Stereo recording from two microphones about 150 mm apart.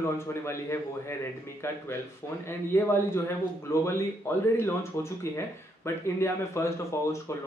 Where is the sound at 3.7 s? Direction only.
20° left (ahead or behind).